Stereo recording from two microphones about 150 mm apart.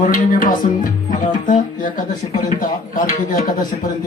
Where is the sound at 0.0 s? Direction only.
60° left (ahead or behind).